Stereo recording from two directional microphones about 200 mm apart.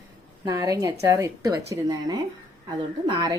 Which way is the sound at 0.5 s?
20° right (ahead or behind).